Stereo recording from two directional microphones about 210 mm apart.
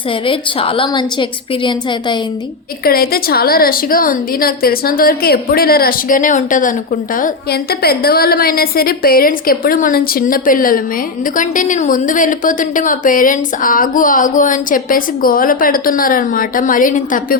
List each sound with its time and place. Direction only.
0.3 s a woman's voice: 25° left (ahead or behind)
2.8 s a woman's voice: 45° left (ahead or behind)